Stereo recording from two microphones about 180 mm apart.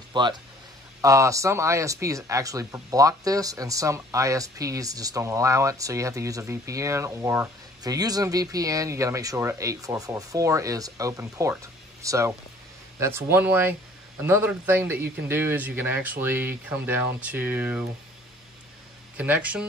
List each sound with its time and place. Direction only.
0.1 s speech: 25° right (ahead or behind); by 17.8 s 10° right (ahead or behind)
19.1 s speech: 10° right (ahead or behind)